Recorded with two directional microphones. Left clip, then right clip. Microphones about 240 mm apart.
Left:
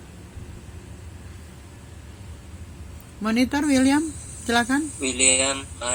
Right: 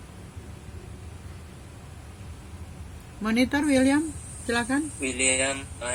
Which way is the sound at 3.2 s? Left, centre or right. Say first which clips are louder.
Left 2 dB; centre.